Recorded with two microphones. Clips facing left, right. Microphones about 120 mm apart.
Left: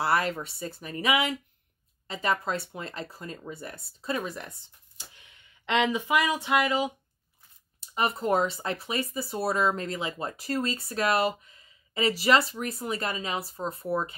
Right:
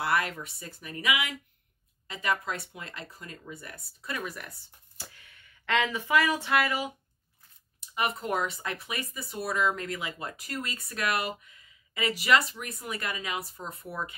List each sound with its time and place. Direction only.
0.0 s speech: 30° left (ahead or behind)
8.2 s speech: 30° left (ahead or behind)